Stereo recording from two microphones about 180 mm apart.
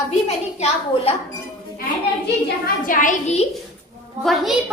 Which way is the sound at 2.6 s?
50° left (ahead or behind).